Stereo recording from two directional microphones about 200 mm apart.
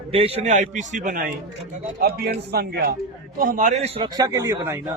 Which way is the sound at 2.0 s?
55° right (ahead or behind).